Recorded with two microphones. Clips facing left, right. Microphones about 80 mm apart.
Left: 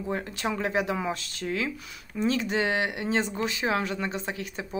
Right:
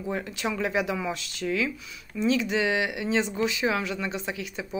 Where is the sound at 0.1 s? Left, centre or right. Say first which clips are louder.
Even; left.